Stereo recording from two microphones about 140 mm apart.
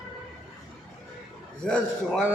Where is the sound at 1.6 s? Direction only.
5° left (ahead or behind).